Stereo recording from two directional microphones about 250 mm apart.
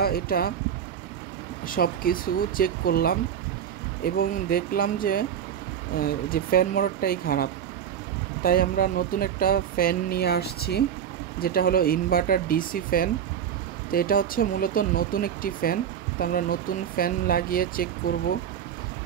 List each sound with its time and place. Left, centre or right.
0.0 s speech: left
1.7 s speech: left